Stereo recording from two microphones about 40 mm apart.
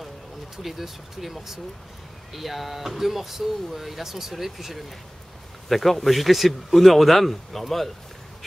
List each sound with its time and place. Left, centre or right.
0.6 s speech: centre